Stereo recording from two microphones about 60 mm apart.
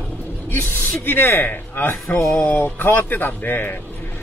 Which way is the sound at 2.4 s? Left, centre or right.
Left.